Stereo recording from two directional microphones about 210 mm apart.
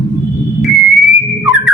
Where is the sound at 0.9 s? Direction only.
Centre (ahead or behind).